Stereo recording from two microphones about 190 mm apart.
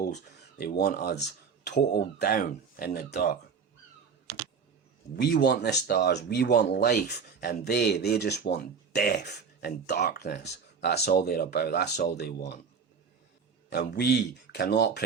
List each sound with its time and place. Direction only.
0.6 s speech: 55° left (ahead or behind)
5.1 s speech: 60° left (ahead or behind)
13.7 s speech: 60° left (ahead or behind)